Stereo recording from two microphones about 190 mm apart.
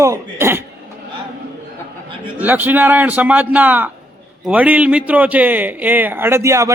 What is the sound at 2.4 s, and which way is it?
A man's voice, 10° right (ahead or behind).